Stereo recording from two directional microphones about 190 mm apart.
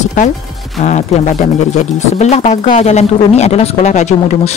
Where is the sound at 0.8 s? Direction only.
35° left (ahead or behind).